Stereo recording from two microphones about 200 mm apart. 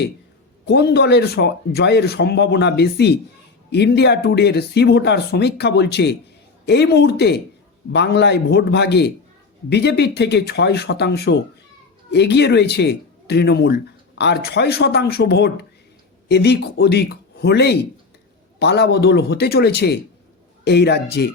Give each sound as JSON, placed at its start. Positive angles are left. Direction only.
{"t": 0.6, "sound": "speech", "side_deg": 55}